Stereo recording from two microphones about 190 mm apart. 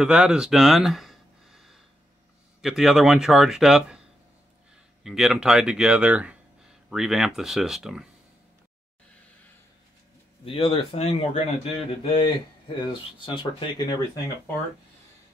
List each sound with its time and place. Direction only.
0.0 s a sound: 5° right (ahead or behind)
2.6 s speech: centre (ahead or behind)
5.0 s speech: centre (ahead or behind)
10.4 s speech: 25° left (ahead or behind)